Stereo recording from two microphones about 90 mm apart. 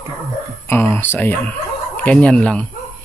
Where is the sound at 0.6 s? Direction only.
25° left (ahead or behind).